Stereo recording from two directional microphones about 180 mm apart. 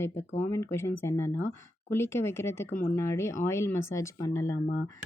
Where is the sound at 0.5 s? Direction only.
15° left (ahead or behind).